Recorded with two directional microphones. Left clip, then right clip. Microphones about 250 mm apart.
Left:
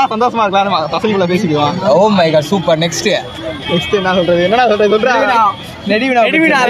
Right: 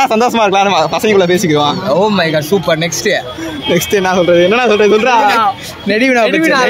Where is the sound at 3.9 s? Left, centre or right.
Right.